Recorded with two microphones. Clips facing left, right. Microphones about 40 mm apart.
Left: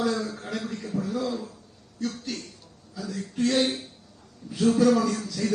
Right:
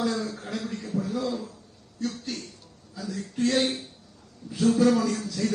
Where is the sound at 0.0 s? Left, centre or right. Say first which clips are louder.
Left 1 dB; left.